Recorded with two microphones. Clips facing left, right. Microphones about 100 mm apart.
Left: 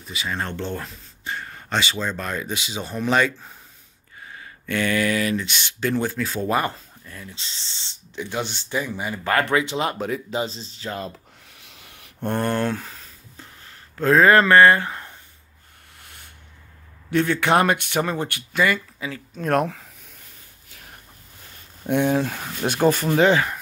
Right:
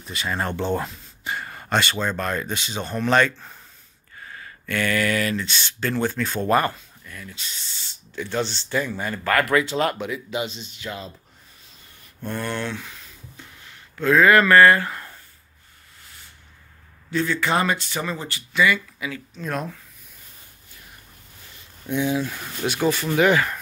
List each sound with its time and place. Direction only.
0.0 s speech: centre (ahead or behind); by 1.3 s 15° right (ahead or behind)
1.3 s speech: 5° right (ahead or behind)
4.2 s speech: 20° left (ahead or behind)
6.7 s speech: 30° left (ahead or behind)
9.3 s speech: 25° left (ahead or behind)
9.9 s speech: 40° left (ahead or behind)
11.6 s rub: 80° left
12.3 s a sound: 45° left (ahead or behind); by 15.1 s 20° left (ahead or behind)
17.1 s speech: 60° left (ahead or behind)
18.9 s speech: 30° left (ahead or behind)
19.3 s speech: 55° left (ahead or behind)
21.8 s speech: 55° left (ahead or behind)
23.1 s speech: 25° left (ahead or behind)